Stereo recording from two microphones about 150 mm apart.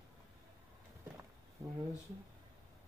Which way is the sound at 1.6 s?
15° right (ahead or behind).